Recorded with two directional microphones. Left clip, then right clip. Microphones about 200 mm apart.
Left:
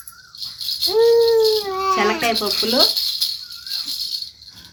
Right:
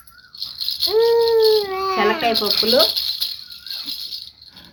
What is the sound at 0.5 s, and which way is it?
Rattle, 50° right (ahead or behind).